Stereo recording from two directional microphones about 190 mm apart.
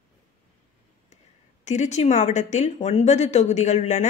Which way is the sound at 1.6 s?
40° left (ahead or behind).